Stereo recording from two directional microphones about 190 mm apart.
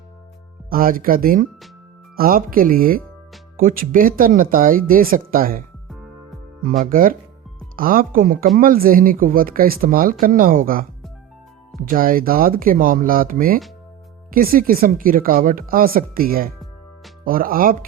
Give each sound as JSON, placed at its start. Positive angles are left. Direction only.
{"t": 0.7, "sound": "speech", "side_deg": -50}
{"t": 6.9, "sound": "speech", "side_deg": -45}
{"t": 11.9, "sound": "speech", "side_deg": -50}